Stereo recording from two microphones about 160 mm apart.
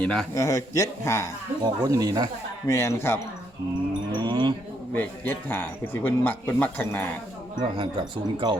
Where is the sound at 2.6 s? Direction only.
15° left (ahead or behind).